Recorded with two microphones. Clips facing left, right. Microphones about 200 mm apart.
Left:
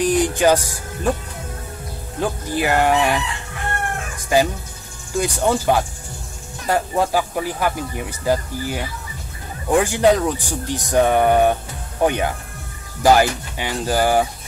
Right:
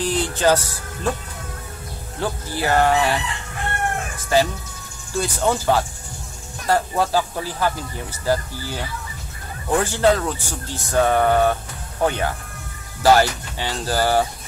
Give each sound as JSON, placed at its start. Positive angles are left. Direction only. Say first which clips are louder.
{"t": 0.0, "sound": "music", "louder": "left 4 dB", "side_deg": 15}
{"t": 2.1, "sound": "speech", "louder": "left 4 dB", "side_deg": 15}
{"t": 4.3, "sound": "speech", "louder": "left 1 dB", "side_deg": 15}